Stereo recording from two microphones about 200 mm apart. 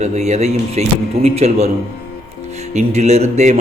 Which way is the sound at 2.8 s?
35° right (ahead or behind).